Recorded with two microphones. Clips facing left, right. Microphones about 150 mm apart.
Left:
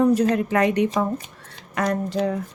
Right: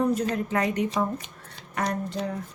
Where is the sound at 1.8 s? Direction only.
90° left.